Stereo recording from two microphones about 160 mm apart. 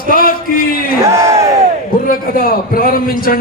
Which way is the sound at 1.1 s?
15° right (ahead or behind).